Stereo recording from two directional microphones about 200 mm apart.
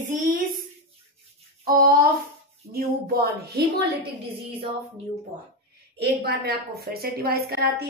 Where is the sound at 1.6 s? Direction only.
50° right (ahead or behind).